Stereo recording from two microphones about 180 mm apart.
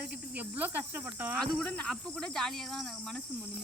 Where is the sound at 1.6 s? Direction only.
5° left (ahead or behind).